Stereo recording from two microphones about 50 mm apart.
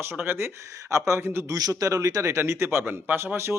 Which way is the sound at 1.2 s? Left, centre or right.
Right.